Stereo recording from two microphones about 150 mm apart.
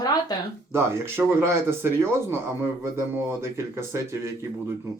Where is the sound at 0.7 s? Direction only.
15° right (ahead or behind).